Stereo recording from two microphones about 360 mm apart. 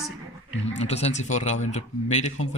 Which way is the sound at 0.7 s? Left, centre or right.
Centre.